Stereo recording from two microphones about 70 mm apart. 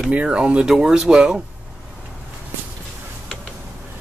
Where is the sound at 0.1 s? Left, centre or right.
Centre.